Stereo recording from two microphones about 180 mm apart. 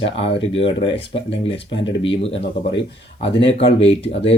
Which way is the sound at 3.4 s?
30° left (ahead or behind).